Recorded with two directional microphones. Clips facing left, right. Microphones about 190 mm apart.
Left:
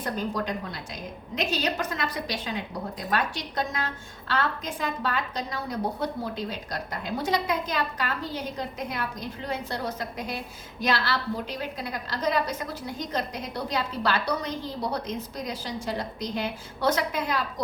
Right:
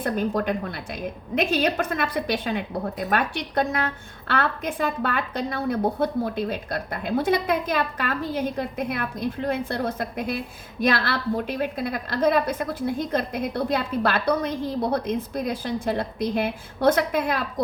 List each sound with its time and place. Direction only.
0.0 s a woman's voice: 55° right (ahead or behind)